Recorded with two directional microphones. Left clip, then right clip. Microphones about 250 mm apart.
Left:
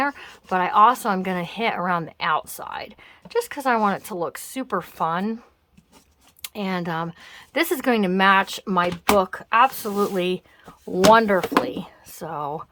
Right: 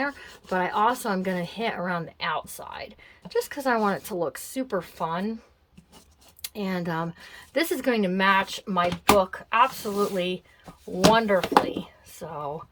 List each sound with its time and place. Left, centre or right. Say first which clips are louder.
0.0 s a woman's voice: left 5 dB; centre
6.4 s speech: left 3 dB; centre